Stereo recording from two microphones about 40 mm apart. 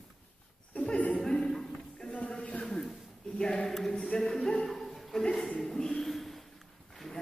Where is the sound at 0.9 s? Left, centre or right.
Left.